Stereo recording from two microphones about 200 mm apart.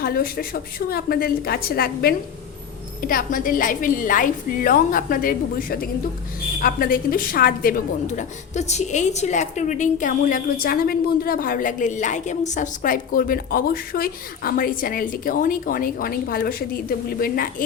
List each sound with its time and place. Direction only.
0.0 s a woman's voice: 50° left (ahead or behind)